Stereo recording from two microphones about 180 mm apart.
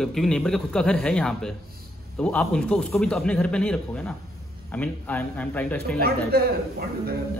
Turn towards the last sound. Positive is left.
turn(degrees=-60)  # may be behind; listen again after turning